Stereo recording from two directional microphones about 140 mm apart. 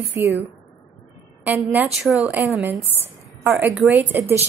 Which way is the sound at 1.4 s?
10° right (ahead or behind).